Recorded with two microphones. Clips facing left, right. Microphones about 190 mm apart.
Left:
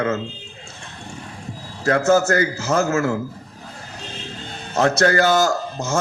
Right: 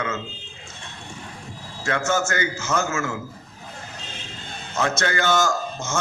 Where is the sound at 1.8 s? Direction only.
35° left (ahead or behind).